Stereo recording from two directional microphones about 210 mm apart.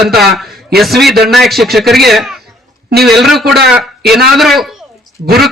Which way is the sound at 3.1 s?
Centre (ahead or behind).